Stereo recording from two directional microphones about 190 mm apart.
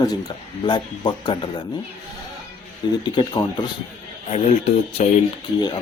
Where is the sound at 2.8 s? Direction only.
25° left (ahead or behind).